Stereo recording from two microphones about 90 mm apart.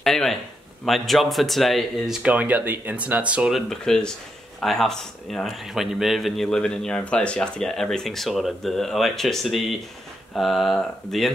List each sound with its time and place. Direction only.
0.0 s speech: 5° left (ahead or behind)
2.2 s speech: 15° right (ahead or behind)
3.5 s speech: 5° left (ahead or behind)